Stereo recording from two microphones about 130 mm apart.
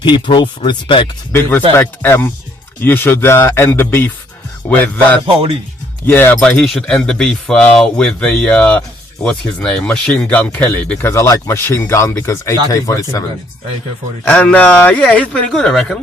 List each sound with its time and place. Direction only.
0.0 s speech: 35° left (ahead or behind)
1.3 s speech: 20° left (ahead or behind)
14.3 s speech: 10° left (ahead or behind)